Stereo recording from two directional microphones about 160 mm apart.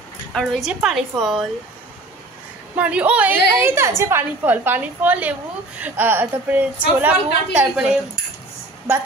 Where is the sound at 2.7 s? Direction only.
10° right (ahead or behind).